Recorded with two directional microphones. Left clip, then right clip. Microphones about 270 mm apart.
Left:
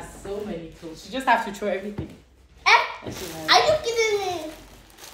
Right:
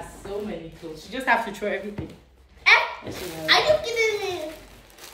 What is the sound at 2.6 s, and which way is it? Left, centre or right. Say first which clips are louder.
Laughter: even; centre.